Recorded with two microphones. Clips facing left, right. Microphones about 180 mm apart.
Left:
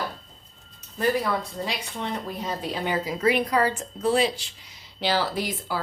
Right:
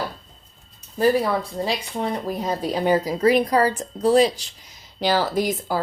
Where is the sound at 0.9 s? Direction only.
30° right (ahead or behind).